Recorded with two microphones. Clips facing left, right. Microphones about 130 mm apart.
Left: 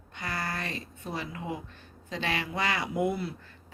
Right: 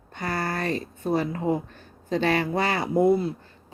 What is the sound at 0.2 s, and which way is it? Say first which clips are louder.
A woman's voice: right 7 dB; 40° right (ahead or behind).